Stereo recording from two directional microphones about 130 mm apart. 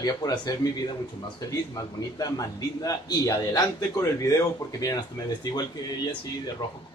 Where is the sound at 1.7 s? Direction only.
25° left (ahead or behind).